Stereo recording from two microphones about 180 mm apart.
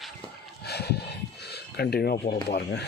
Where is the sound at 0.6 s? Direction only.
65° left (ahead or behind).